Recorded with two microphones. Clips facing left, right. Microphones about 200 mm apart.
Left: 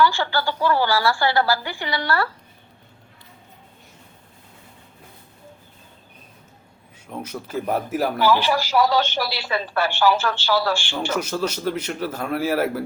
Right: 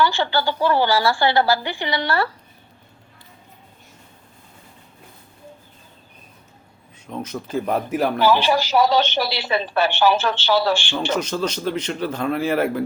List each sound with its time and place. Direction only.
0.0 s speech: 25° right (ahead or behind)
7.1 s speech: 10° left (ahead or behind)
8.2 s speech: 20° right (ahead or behind)
11.1 s a man's voice: 10° left (ahead or behind)